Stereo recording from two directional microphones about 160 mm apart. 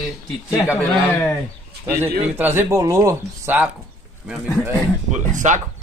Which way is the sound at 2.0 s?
15° right (ahead or behind).